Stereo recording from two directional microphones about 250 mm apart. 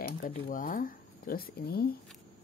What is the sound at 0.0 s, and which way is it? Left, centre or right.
Speech, left.